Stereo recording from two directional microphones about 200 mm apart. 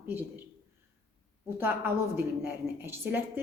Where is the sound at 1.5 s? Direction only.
10° right (ahead or behind).